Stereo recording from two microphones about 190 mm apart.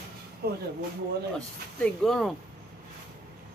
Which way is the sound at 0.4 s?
55° right (ahead or behind).